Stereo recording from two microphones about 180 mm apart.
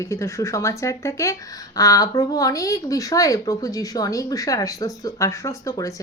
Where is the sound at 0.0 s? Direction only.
15° left (ahead or behind).